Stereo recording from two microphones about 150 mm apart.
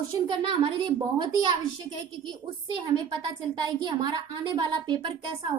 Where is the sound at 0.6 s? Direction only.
35° right (ahead or behind).